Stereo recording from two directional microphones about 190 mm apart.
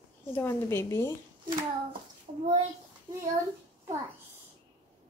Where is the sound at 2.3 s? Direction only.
30° right (ahead or behind).